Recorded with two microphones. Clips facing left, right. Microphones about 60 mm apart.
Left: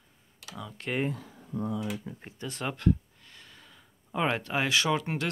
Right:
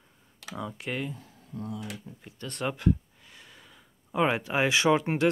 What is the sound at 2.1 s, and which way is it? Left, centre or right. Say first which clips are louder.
Speech: left 5 dB; left.